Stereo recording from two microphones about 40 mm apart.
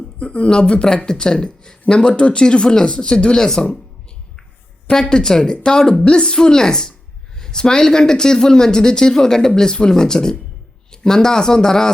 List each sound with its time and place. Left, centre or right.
0.2 s speech: left
4.9 s speech: centre